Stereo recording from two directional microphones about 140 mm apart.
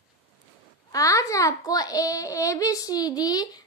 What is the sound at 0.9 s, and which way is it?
Speech, 25° left (ahead or behind).